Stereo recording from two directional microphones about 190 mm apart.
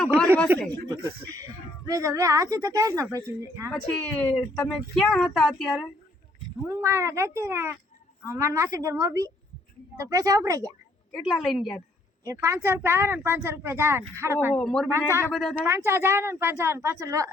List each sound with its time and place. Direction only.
0.5 s a woman's voice: 10° right (ahead or behind)
1.9 s a woman's voice: 15° right (ahead or behind)
3.7 s a woman's voice: 5° left (ahead or behind)
6.7 s a woman's voice: 15° right (ahead or behind)
11.1 s a woman's voice: centre (ahead or behind)
12.2 s a woman's voice: 15° right (ahead or behind)
14.5 s a woman's voice: 5° left (ahead or behind)
14.9 s a woman's voice: 15° right (ahead or behind)
15.3 s a woman's voice: 5° left (ahead or behind)
15.6 s a woman's voice: 15° right (ahead or behind)